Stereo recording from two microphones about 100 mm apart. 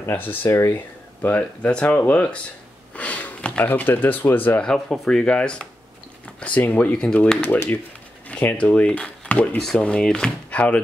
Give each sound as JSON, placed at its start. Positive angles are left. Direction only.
{"t": 0.0, "sound": "speech", "side_deg": 20}
{"t": 1.2, "sound": "speech", "side_deg": 15}
{"t": 4.7, "sound": "speech", "side_deg": 0}
{"t": 7.4, "sound": "speech", "side_deg": 20}